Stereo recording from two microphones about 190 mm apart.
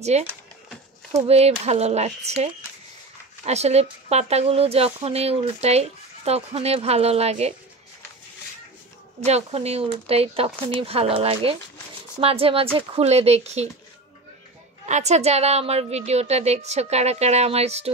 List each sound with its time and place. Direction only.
0.0 s speech: 35° right (ahead or behind)
9.2 s speech: 35° right (ahead or behind)
14.9 s speech: 35° right (ahead or behind)